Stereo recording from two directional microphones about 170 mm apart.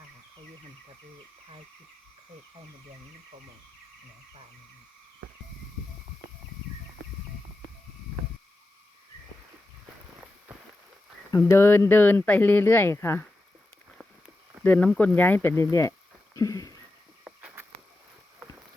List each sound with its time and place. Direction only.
11.3 s speech: 15° left (ahead or behind)
14.6 s speech: 10° left (ahead or behind)
16.4 s a sound: 20° left (ahead or behind)